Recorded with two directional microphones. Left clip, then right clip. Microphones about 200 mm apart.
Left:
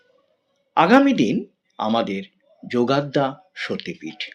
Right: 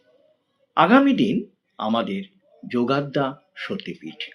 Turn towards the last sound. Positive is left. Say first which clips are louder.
# left 2 dB
turn(degrees=40)  # may be behind; listen again after turning